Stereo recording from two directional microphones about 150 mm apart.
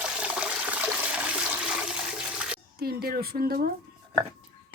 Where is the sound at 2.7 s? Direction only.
90° right.